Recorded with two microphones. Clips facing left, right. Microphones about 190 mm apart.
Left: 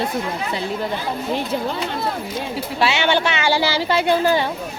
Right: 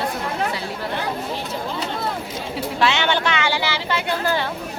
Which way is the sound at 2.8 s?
10° left (ahead or behind).